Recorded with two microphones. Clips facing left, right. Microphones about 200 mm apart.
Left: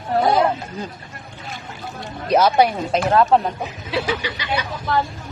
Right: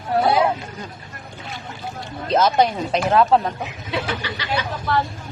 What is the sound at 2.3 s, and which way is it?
Speech, 10° left (ahead or behind).